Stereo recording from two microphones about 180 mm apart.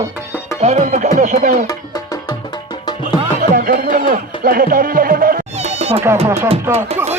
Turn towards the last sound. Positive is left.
turn(degrees=-35)  # may be behind; listen again after turning